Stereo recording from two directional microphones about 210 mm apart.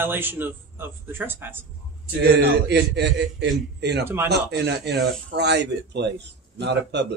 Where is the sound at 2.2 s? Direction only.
50° right (ahead or behind).